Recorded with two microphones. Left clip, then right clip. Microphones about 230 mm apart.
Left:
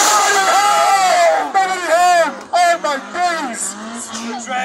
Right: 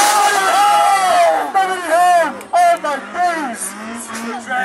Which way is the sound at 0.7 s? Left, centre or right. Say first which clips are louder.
Even; left.